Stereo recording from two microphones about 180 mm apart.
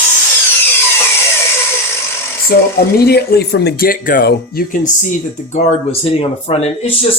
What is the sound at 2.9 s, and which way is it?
Speech, 65° left (ahead or behind).